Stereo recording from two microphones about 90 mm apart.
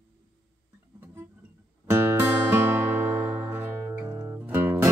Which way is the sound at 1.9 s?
25° right (ahead or behind).